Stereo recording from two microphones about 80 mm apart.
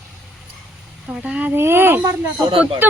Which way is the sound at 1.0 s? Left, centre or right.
Centre.